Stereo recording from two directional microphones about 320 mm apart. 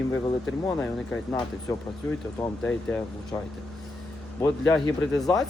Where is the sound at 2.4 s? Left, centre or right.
Centre.